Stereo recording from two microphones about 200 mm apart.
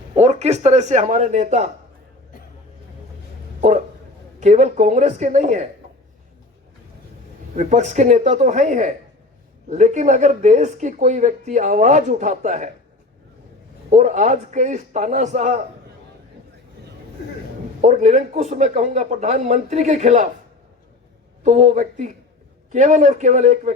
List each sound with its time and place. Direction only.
0.2 s speech: 35° right (ahead or behind)
4.4 s speech: 35° right (ahead or behind)
7.5 s speech: 40° right (ahead or behind)
13.9 s speech: 35° right (ahead or behind)
17.7 s speech: 40° right (ahead or behind)
21.4 s speech: 35° right (ahead or behind)